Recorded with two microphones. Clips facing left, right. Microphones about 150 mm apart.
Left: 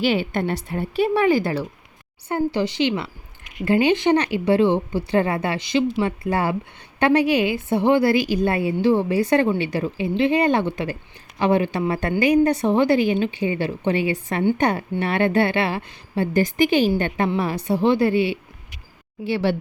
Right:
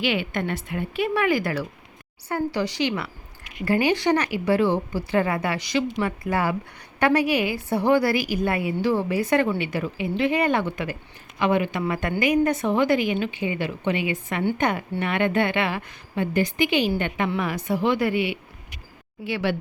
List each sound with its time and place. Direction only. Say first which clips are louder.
0.0 s a woman's voice: left 4 dB; 35° left (ahead or behind)